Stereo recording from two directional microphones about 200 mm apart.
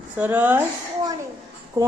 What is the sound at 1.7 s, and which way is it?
Speech, 15° right (ahead or behind).